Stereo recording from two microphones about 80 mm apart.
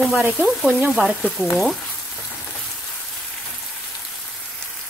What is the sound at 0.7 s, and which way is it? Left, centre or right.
Frying, centre.